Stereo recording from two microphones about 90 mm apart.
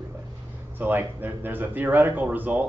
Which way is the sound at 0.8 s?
20° right (ahead or behind).